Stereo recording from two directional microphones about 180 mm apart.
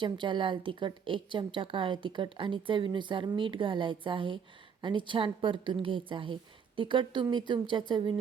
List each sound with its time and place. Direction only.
0.0 s a woman's voice: 25° right (ahead or behind)